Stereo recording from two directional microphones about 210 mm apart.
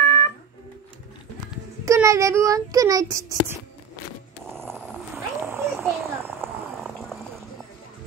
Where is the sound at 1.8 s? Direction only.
15° right (ahead or behind).